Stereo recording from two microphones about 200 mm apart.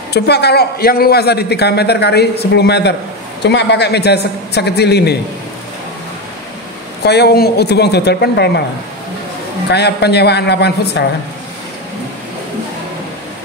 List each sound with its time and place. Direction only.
0.1 s a man's voice: 55° left (ahead or behind)
7.1 s a man's voice: 55° left (ahead or behind)
9.7 s a man's voice: 55° left (ahead or behind)